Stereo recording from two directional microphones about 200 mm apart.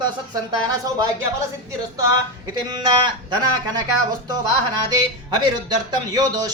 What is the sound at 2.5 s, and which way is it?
Speech, 20° right (ahead or behind).